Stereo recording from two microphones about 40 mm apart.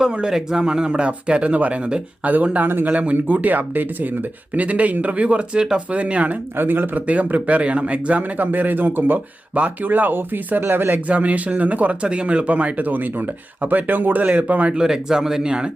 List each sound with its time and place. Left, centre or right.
0.1 s speech: right
1.5 s speech: right
2.6 s speech: right
2.9 s speech: right
6.6 s speech: right
7.1 s speech: right
9.6 s speech: right
9.9 s speech: right
10.9 s speech: right
14.7 s speech: centre